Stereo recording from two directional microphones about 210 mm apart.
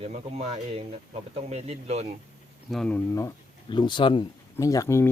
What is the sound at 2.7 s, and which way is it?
Speech, 5° left (ahead or behind).